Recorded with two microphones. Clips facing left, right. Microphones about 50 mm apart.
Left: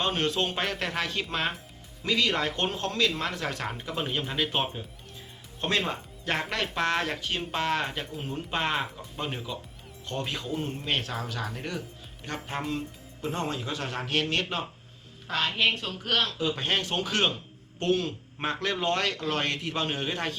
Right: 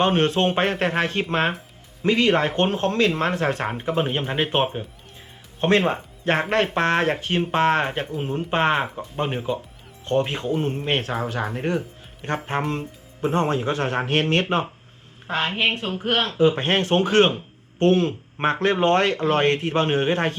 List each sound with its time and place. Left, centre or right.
0.0 s speech: right